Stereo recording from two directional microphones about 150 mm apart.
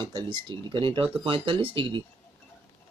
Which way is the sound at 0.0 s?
30° right (ahead or behind).